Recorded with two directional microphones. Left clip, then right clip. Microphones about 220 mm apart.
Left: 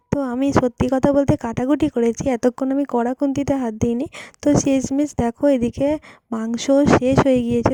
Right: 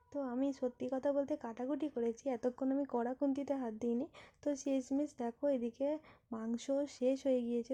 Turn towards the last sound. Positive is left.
turn(degrees=45)  # may be behind; listen again after turning